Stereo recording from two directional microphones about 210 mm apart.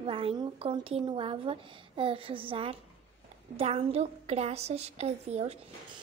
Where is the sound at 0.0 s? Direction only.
25° right (ahead or behind).